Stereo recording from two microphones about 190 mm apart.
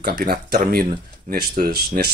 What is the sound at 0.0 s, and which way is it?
Speech, 55° right (ahead or behind).